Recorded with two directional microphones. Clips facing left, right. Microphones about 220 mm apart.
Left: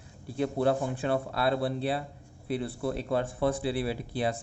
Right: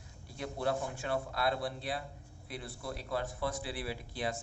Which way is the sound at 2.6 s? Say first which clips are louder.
Left 8 dB; 60° left (ahead or behind).